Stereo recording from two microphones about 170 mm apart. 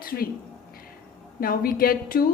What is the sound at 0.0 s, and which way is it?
Speech, 60° left (ahead or behind).